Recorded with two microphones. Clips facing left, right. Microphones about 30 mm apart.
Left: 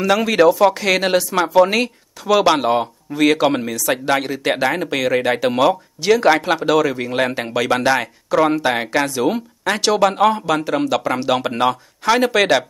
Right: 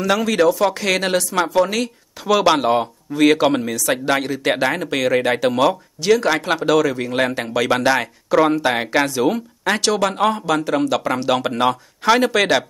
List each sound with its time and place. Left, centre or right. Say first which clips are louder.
0.0 s speech: left 3 dB; centre
1.6 s speech: left 5 dB; centre
2.2 s speech: left 1 dB; centre